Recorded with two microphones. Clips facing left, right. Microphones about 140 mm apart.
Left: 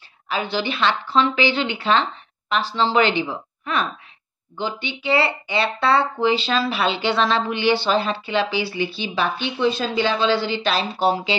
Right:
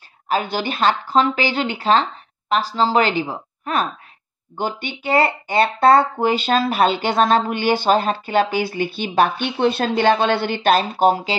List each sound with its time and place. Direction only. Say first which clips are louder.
0.3 s a woman's voice: right 2 dB; 45° right (ahead or behind)